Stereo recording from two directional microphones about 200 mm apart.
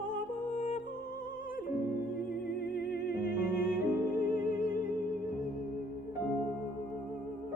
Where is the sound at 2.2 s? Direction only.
50° left (ahead or behind).